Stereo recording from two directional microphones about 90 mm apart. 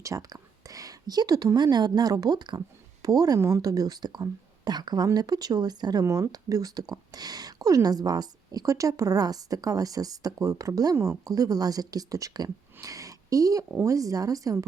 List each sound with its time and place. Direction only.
0.0 s a woman's voice: 40° right (ahead or behind)